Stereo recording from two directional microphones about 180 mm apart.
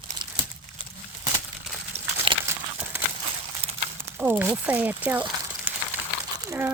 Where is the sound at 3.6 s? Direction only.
35° right (ahead or behind).